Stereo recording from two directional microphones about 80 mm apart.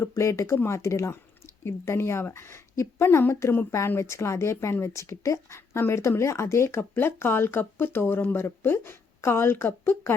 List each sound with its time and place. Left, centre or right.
0.0 s speech: left